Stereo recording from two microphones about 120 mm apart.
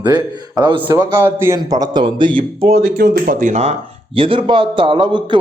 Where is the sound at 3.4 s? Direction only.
80° right.